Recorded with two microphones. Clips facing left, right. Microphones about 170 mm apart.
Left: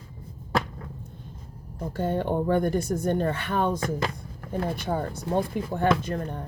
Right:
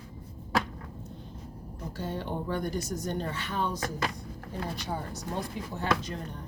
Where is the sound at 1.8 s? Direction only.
55° left (ahead or behind).